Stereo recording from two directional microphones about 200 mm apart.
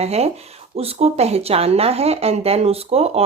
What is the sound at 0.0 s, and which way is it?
Speech, 30° right (ahead or behind).